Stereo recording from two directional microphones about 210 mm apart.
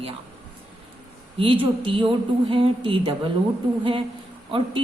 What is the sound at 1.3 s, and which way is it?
A woman's voice, 25° right (ahead or behind).